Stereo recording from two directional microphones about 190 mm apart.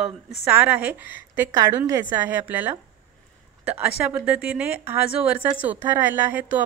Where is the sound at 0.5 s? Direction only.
10° right (ahead or behind).